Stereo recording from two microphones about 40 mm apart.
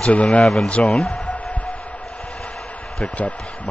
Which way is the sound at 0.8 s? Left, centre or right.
Centre.